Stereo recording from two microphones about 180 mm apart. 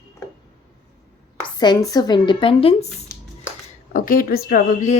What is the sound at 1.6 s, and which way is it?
Speech, 20° left (ahead or behind).